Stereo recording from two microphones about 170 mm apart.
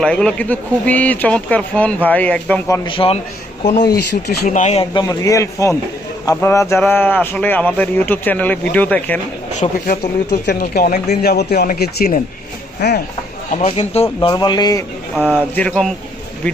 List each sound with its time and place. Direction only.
0.0 s speech: 5° left (ahead or behind)
2.8 s a man's voice: 30° left (ahead or behind)
3.6 s speech: 40° left (ahead or behind)
4.9 s a man's voice: 20° left (ahead or behind)
9.6 s speech: 50° left (ahead or behind)
10.4 s speech: 70° left (ahead or behind)
13.5 s a man's voice: 40° left (ahead or behind); by 14.8 s 25° left (ahead or behind)
15.1 s speech: 10° right (ahead or behind)
15.5 s speech: 5° left (ahead or behind)